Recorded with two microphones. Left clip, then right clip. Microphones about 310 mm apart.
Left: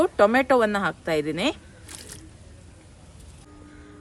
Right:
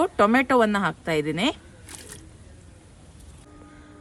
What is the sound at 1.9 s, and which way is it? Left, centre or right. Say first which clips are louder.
Music: left 1 dB; centre.